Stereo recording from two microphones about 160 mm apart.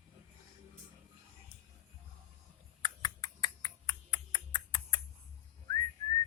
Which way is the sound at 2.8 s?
25° left (ahead or behind).